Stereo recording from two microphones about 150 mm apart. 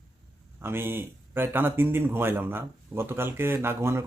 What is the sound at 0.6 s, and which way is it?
Speech, 15° right (ahead or behind).